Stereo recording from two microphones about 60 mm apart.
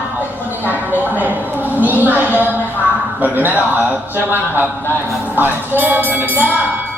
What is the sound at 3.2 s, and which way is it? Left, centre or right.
Speech, right.